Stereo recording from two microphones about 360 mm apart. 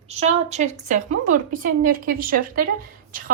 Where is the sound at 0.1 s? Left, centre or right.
Centre.